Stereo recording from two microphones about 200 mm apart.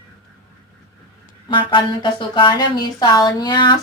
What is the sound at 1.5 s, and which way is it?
A woman's voice, 25° left (ahead or behind).